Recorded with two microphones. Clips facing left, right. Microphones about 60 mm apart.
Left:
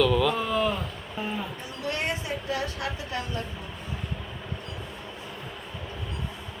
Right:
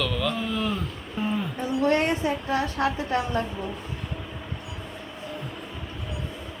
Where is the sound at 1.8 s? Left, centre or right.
Right.